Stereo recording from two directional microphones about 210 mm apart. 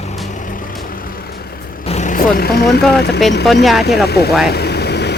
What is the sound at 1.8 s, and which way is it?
Vehicle, 35° left (ahead or behind).